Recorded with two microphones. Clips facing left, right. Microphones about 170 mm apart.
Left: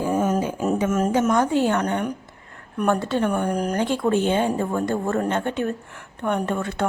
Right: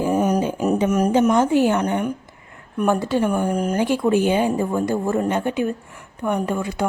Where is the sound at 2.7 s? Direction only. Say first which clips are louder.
Right 2 dB; 5° right (ahead or behind).